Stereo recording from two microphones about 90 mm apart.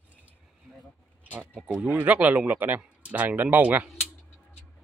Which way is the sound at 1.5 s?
5° right (ahead or behind).